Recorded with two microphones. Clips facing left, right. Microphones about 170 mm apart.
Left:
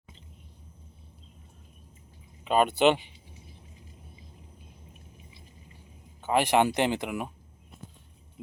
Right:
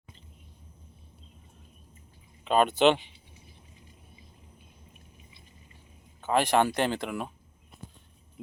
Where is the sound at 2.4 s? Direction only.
10° left (ahead or behind).